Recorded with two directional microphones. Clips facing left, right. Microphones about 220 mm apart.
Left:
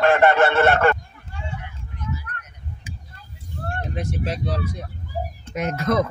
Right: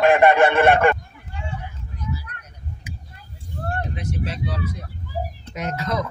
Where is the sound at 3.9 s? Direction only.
45° left (ahead or behind).